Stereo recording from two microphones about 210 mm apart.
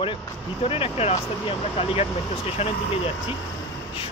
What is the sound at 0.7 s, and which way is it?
Speech, 25° left (ahead or behind).